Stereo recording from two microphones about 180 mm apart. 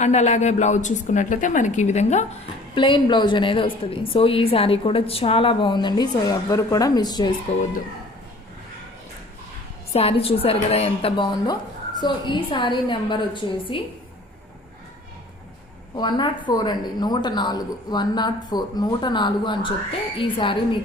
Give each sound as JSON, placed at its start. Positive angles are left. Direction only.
{"t": 0.0, "sound": "a woman's voice", "side_deg": 40}
{"t": 2.7, "sound": "a woman's voice", "side_deg": 25}
{"t": 9.9, "sound": "a woman's voice", "side_deg": 35}
{"t": 16.0, "sound": "a woman's voice", "side_deg": 25}